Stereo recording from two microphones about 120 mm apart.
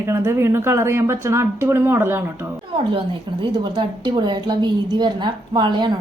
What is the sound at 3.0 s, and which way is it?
A woman's voice, 40° right (ahead or behind).